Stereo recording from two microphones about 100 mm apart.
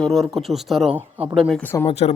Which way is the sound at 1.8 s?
90° left.